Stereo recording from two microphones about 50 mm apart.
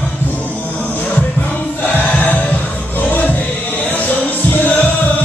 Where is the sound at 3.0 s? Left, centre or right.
Left.